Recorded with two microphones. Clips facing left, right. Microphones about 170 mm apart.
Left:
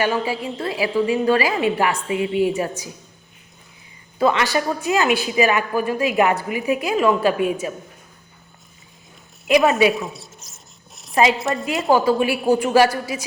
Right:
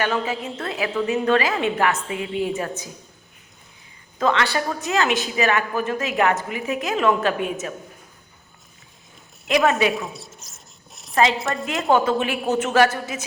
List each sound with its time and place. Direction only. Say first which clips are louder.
0.0 s a woman's voice: left 2 dB; 10° left (ahead or behind)
4.2 s a woman's voice: left 3 dB; 10° left (ahead or behind)
9.5 s a woman's voice: left 3 dB; 20° left (ahead or behind)
9.8 s a sound: left 4 dB; centre (ahead or behind)
11.3 s a woman's voice: left 3 dB; centre (ahead or behind)